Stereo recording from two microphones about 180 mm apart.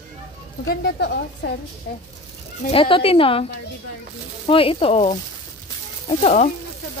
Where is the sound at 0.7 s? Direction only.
65° left (ahead or behind).